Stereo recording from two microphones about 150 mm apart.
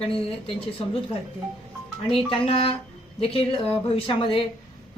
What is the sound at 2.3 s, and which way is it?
A woman's voice, 35° left (ahead or behind).